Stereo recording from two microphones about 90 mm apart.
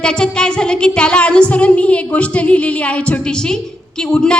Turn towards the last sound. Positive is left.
turn(degrees=10)  # may be behind; listen again after turning